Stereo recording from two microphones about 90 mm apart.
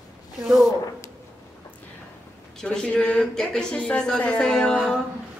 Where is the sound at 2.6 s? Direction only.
10° left (ahead or behind).